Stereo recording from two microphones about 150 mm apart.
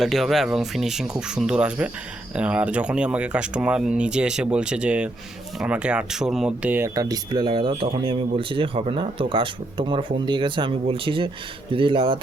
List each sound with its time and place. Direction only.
0.0 s speech: centre (ahead or behind); by 12.2 s 35° right (ahead or behind)